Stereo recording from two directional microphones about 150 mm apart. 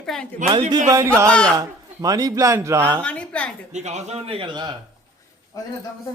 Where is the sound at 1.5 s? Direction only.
25° right (ahead or behind).